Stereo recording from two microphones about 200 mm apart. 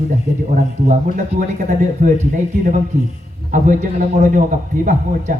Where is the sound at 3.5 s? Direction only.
40° right (ahead or behind).